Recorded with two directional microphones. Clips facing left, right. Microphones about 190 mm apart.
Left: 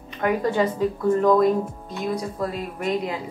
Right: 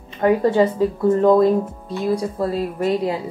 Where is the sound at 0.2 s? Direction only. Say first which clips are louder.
Right 6 dB; 30° right (ahead or behind).